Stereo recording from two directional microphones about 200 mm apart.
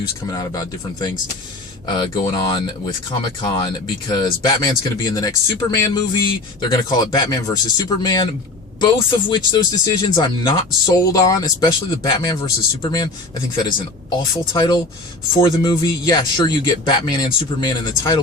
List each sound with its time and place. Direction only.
0.3 s speech: 20° left (ahead or behind)